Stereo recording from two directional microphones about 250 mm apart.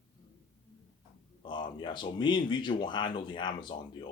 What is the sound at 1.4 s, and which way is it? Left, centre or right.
Speech, centre.